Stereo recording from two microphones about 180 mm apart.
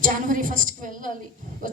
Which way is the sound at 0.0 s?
50° right (ahead or behind).